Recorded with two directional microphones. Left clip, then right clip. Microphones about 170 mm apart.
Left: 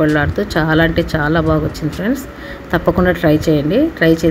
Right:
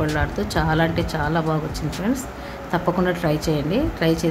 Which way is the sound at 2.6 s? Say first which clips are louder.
Left 7 dB; 15° left (ahead or behind).